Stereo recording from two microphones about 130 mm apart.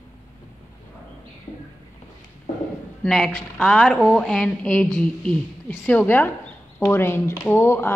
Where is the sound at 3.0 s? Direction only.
Centre (ahead or behind).